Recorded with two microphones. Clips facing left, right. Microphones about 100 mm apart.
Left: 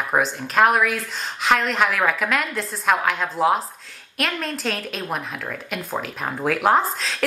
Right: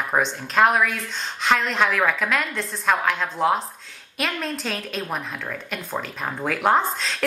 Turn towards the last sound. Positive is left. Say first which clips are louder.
# left 1 dB
turn(degrees=0)  # may be behind; listen again after turning